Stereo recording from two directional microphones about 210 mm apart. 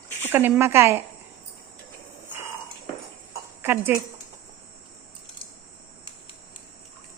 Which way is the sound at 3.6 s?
10° right (ahead or behind).